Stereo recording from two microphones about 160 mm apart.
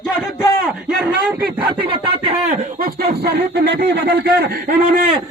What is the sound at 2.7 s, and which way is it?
A man's voice, 70° right (ahead or behind).